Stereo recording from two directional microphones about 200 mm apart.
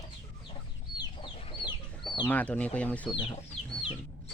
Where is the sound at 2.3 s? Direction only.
10° left (ahead or behind).